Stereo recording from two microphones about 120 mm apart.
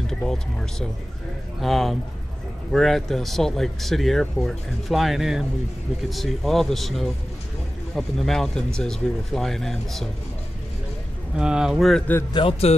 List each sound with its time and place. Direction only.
0.0 s speech: 5° left (ahead or behind)
11.3 s speech: 5° right (ahead or behind)
12.3 s speech: 45° left (ahead or behind)